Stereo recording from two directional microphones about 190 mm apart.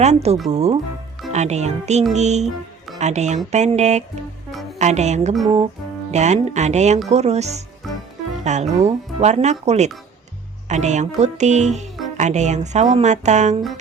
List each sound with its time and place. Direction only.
0.0 s speech: 35° right (ahead or behind)
7.8 s music: centre (ahead or behind)
8.4 s speech: 35° right (ahead or behind)